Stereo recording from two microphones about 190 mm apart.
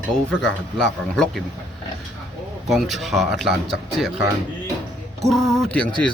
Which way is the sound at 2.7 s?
Centre (ahead or behind).